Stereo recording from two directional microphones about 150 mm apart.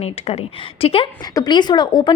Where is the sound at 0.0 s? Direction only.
45° left (ahead or behind).